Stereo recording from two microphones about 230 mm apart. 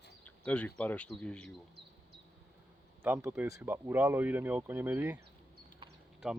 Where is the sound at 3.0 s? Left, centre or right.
Centre.